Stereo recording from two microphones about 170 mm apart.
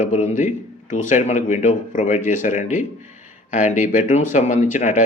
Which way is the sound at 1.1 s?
45° left (ahead or behind).